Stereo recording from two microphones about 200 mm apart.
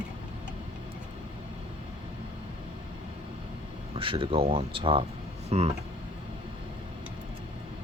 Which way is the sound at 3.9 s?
25° right (ahead or behind).